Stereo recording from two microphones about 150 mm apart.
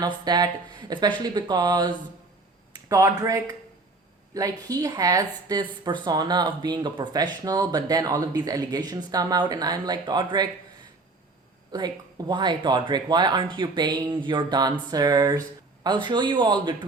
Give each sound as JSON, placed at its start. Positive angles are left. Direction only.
{"t": 0.0, "sound": "speech", "side_deg": -30}
{"t": 11.7, "sound": "speech", "side_deg": -30}